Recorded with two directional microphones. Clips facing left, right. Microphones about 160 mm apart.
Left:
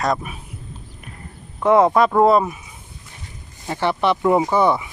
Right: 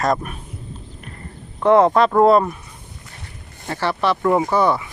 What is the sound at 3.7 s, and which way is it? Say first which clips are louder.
Speech: left 1 dB; 15° left (ahead or behind).